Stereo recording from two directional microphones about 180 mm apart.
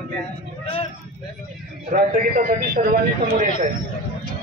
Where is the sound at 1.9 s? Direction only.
55° right (ahead or behind).